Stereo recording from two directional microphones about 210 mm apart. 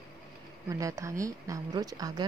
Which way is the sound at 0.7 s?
15° right (ahead or behind).